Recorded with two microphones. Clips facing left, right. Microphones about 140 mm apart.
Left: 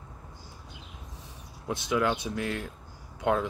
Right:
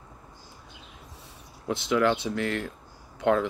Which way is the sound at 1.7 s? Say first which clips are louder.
Right 3 dB; 15° left (ahead or behind).